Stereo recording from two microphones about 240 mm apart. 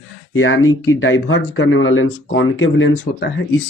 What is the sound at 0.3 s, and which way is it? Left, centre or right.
Speech, left.